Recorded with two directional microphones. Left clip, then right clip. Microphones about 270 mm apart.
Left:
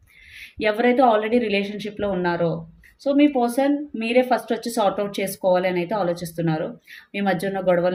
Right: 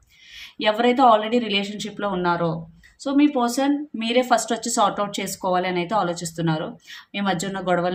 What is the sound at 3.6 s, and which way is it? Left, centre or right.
Speech, centre.